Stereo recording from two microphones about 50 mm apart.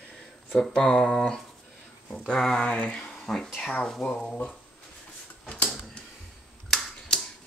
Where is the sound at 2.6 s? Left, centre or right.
Left.